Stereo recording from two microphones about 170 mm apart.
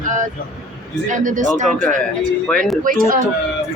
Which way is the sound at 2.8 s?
55° right (ahead or behind).